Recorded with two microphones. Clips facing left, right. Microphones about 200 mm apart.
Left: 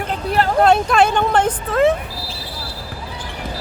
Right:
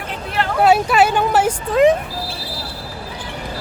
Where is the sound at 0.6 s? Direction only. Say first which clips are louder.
Right 2 dB; 5° right (ahead or behind).